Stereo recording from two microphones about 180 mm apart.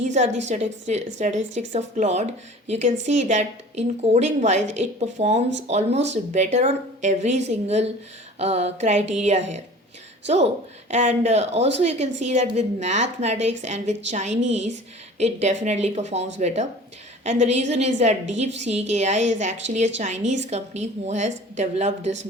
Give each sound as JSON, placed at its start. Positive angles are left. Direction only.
{"t": 0.0, "sound": "a woman's voice", "side_deg": -40}
{"t": 10.2, "sound": "a woman's voice", "side_deg": -35}